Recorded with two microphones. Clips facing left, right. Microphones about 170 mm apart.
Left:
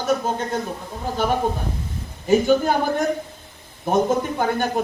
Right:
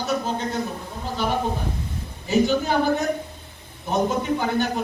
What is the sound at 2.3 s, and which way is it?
A man's voice, 50° left (ahead or behind).